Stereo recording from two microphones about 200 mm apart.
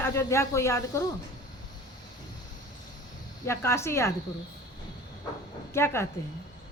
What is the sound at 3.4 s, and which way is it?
Speech, 15° left (ahead or behind).